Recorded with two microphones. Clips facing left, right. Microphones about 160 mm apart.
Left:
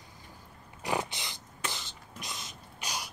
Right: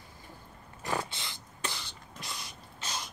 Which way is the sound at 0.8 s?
15° left (ahead or behind).